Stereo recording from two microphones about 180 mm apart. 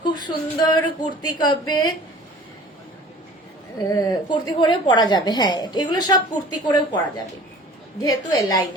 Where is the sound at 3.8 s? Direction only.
20° left (ahead or behind).